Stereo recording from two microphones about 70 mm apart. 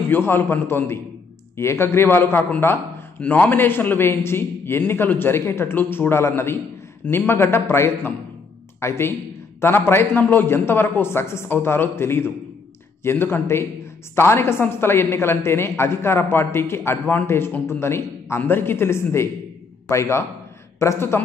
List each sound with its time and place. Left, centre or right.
0.1 s a man's voice: left